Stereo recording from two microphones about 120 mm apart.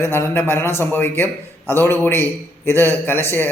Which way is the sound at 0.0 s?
20° left (ahead or behind).